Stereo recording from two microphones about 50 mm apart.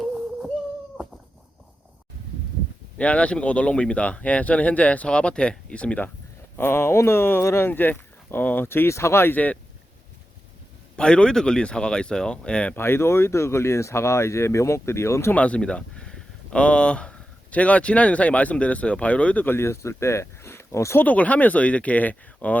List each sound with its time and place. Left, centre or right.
3.0 s speech: left
6.6 s speech: left
7.7 s speech: left
7.9 s a sound: left
8.4 s speech: left
8.9 s speech: left
9.3 s speech: left
10.9 s speech: centre
12.7 s speech: left
15.4 s speech: left
19.5 s speech: left
21.0 s speech: left